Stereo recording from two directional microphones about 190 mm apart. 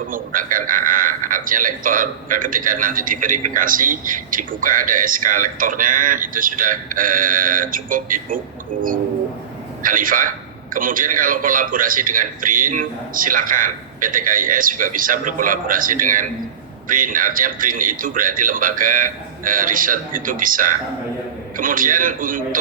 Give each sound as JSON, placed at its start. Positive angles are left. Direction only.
{"t": 0.1, "sound": "a man's voice", "side_deg": -45}
{"t": 9.8, "sound": "a man's voice", "side_deg": -45}